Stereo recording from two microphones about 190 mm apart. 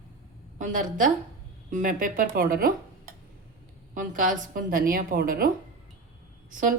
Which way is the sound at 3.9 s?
45° right (ahead or behind).